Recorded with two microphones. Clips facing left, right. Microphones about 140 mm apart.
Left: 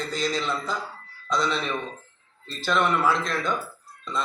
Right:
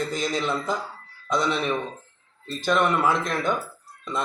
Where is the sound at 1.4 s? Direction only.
20° right (ahead or behind).